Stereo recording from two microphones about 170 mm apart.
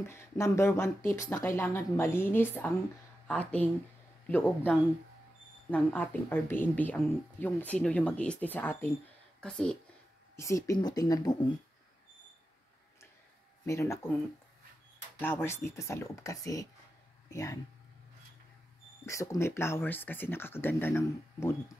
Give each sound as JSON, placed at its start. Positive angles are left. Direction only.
{"t": 0.0, "sound": "speech", "side_deg": 15}
{"t": 10.3, "sound": "speech", "side_deg": 20}
{"t": 13.7, "sound": "speech", "side_deg": 15}
{"t": 15.1, "sound": "speech", "side_deg": 15}
{"t": 19.0, "sound": "speech", "side_deg": 15}